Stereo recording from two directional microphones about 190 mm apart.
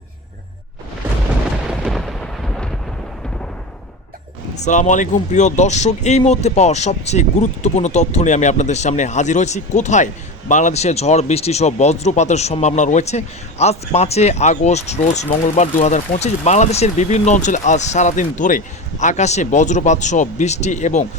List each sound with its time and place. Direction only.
1.8 s thunder: centre (ahead or behind)
4.5 s speech: 40° left (ahead or behind)